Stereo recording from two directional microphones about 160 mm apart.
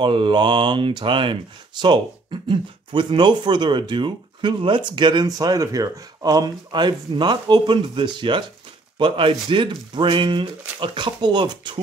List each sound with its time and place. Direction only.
0.0 s speech: 30° right (ahead or behind)